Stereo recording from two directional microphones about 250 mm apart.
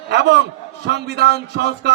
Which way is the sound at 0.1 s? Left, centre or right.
Right.